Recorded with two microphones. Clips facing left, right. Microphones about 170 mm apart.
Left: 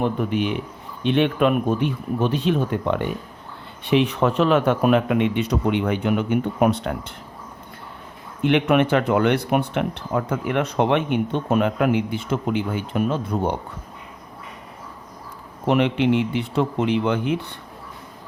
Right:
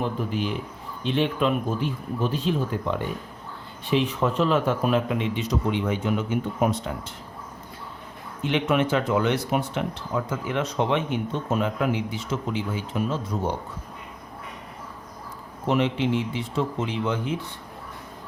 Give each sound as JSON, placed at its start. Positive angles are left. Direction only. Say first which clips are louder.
{"t": 0.0, "sound": "a man's voice", "louder": "left 5 dB", "side_deg": 65}
{"t": 8.4, "sound": "speech", "louder": "left 5 dB", "side_deg": 60}
{"t": 15.6, "sound": "speech", "louder": "left 4 dB", "side_deg": 65}